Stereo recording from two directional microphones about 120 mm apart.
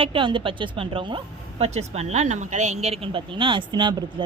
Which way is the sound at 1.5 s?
65° right (ahead or behind).